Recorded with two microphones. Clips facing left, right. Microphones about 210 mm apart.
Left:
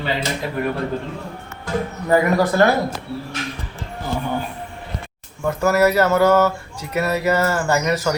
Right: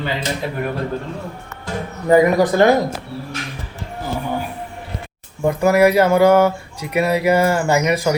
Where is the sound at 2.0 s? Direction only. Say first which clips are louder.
Right 4 dB; 20° right (ahead or behind).